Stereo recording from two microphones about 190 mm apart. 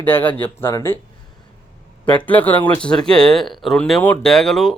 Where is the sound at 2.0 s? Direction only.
10° left (ahead or behind).